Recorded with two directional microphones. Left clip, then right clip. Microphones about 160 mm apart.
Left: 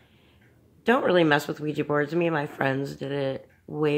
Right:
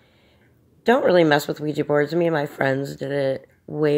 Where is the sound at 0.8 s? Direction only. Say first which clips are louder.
Right 5 dB; 25° right (ahead or behind).